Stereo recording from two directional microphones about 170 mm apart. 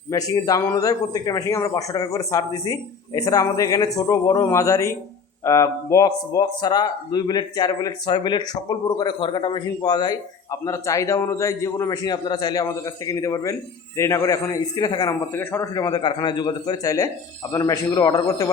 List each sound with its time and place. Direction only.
0.1 s a man's voice: 20° left (ahead or behind)